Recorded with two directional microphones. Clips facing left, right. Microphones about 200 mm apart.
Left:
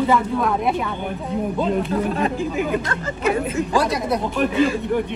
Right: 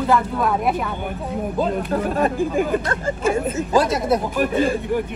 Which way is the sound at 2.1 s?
45° right (ahead or behind).